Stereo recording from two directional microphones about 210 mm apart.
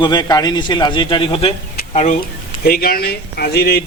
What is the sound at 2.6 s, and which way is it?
Speech, 45° left (ahead or behind).